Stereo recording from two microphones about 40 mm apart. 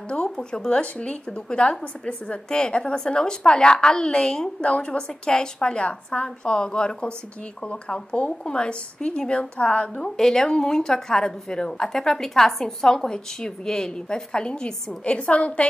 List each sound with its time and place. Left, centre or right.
0.1 s a woman's voice: left
4.9 s a woman's voice: left
10.1 s a woman's voice: centre; by 15.6 s left